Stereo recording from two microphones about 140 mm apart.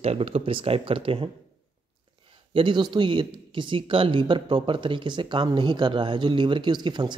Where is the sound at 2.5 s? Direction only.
35° right (ahead or behind).